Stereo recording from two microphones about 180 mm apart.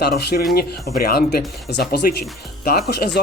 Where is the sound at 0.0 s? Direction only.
60° left (ahead or behind).